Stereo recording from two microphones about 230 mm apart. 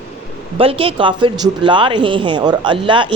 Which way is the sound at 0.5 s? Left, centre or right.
Right.